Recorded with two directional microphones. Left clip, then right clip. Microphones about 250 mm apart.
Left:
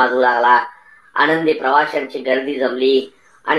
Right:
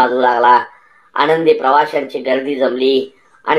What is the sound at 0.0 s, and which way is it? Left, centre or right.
A woman's voice, right.